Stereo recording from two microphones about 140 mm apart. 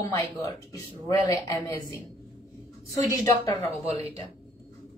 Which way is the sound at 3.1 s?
20° left (ahead or behind).